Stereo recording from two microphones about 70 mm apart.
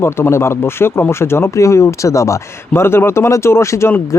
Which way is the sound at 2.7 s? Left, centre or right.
Left.